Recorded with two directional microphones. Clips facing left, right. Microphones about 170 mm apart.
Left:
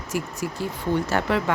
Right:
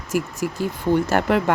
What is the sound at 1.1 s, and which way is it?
Speech, 50° right (ahead or behind).